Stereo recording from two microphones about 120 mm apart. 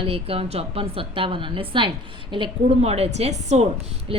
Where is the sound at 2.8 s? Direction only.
60° right (ahead or behind).